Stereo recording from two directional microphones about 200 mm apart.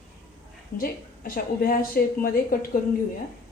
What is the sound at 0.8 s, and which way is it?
Speech, 45° left (ahead or behind).